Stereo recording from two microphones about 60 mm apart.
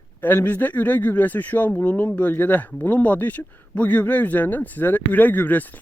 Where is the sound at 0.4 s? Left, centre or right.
Left.